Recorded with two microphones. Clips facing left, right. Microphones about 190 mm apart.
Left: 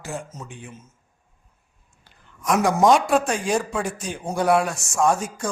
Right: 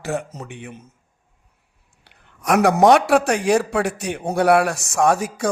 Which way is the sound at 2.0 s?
65° right (ahead or behind).